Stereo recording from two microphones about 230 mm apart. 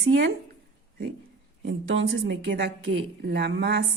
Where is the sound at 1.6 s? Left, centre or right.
Right.